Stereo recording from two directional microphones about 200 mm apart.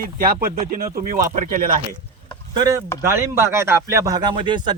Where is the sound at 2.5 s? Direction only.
15° right (ahead or behind).